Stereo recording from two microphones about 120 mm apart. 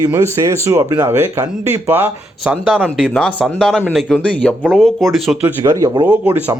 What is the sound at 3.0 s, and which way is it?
Speech, 10° left (ahead or behind).